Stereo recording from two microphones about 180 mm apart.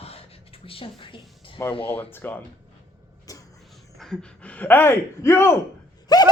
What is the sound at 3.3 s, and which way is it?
Music, 20° left (ahead or behind).